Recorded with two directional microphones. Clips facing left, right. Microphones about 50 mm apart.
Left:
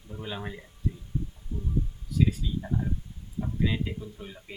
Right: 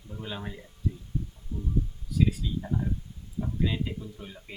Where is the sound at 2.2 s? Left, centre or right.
Centre.